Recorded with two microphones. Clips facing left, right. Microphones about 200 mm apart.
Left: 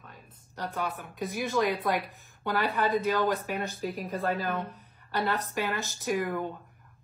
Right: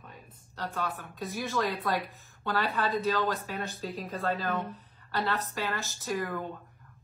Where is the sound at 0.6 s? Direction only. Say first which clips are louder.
Left 1 dB; 15° left (ahead or behind).